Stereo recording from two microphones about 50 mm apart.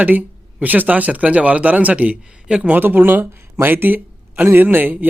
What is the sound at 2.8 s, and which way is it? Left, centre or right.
Speech, right.